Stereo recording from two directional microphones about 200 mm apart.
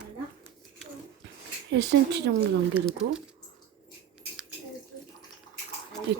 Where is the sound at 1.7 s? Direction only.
60° right (ahead or behind).